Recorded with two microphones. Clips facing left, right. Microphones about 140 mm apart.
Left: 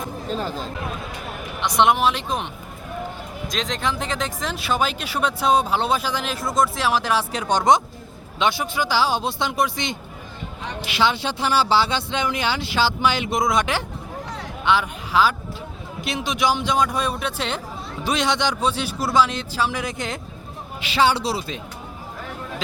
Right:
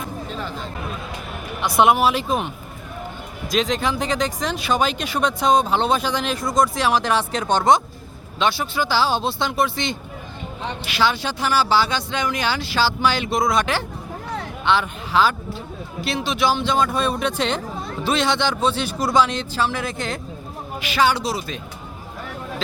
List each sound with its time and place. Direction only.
0.3 s speech: 35° left (ahead or behind)
1.6 s speech: 5° right (ahead or behind)
3.5 s speech: 5° right (ahead or behind); by 21.6 s 25° left (ahead or behind)